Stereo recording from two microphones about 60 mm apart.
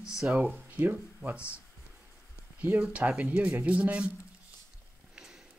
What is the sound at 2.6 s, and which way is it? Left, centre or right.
Speech, right.